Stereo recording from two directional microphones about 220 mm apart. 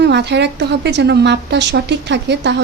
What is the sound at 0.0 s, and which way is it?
Speech, 50° right (ahead or behind).